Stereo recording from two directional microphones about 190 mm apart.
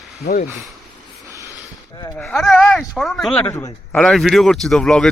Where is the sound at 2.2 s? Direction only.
Centre (ahead or behind).